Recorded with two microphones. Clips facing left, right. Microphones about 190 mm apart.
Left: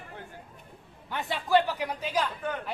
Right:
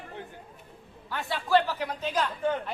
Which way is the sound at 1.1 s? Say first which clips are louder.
Even; 20° left (ahead or behind).